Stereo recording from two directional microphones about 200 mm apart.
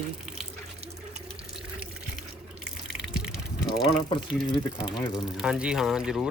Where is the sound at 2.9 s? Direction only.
5° right (ahead or behind).